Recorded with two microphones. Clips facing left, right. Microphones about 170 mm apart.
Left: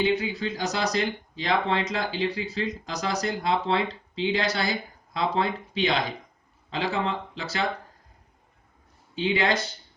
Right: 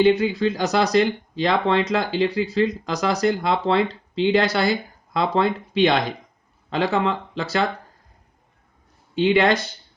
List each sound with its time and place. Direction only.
0.0 s speech: 65° right (ahead or behind)
9.1 s speech: 65° right (ahead or behind)